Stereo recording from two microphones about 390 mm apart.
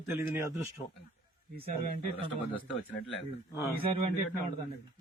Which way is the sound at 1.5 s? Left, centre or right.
Right.